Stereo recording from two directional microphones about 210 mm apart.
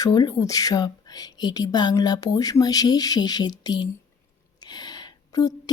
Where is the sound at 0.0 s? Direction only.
20° left (ahead or behind).